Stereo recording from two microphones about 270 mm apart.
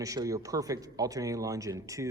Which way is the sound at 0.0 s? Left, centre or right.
Centre.